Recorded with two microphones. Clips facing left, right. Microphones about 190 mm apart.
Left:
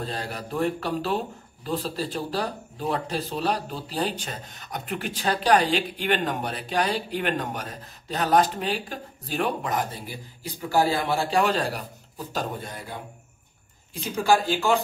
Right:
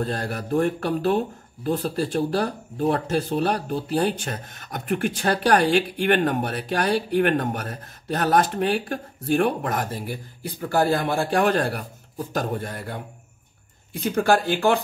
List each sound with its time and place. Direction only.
0.0 s speech: 50° right (ahead or behind)
14.0 s speech: 60° right (ahead or behind)